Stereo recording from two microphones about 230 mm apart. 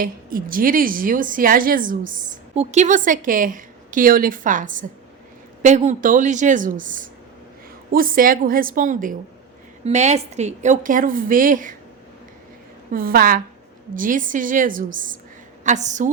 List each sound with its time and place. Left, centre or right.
0.0 s a woman's voice: right
12.9 s a woman's voice: right